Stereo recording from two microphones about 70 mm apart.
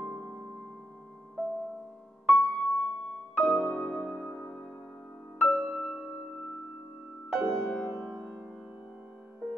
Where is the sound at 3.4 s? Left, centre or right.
Centre.